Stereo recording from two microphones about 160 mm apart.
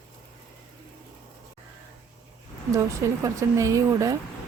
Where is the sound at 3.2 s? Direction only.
20° right (ahead or behind).